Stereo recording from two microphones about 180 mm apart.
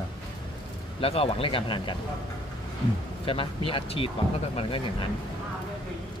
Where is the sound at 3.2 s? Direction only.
30° left (ahead or behind).